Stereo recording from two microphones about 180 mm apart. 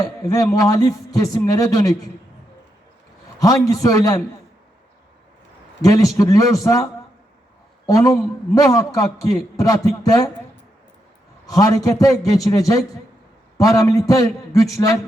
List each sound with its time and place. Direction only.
0.0 s a man's voice: 20° left (ahead or behind)
3.4 s a man's voice: 20° left (ahead or behind)
5.8 s a man's voice: 20° left (ahead or behind)
7.9 s a man's voice: 20° left (ahead or behind)
11.4 s a man's voice: 20° left (ahead or behind)